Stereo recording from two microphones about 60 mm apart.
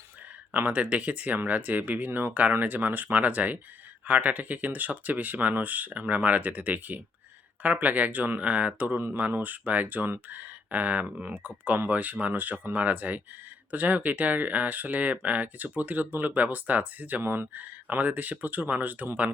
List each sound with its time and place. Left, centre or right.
0.5 s speech: right